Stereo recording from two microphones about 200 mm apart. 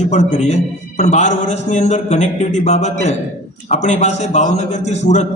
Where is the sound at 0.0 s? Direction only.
35° left (ahead or behind).